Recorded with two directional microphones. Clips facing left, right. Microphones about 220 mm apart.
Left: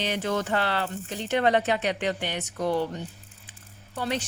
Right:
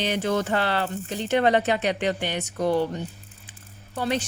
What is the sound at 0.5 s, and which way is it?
Speech, 20° right (ahead or behind).